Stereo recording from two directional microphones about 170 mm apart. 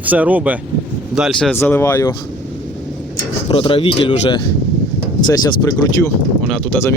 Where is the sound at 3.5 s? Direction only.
30° left (ahead or behind).